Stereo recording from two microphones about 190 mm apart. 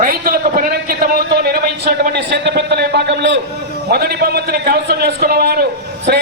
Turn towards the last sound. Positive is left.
turn(degrees=-55)  # may be behind; listen again after turning